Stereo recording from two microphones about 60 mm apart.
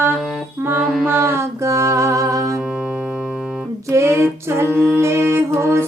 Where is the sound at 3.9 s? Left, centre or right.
Right.